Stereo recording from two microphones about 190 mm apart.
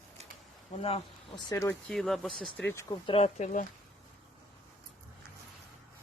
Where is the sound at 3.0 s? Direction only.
30° left (ahead or behind).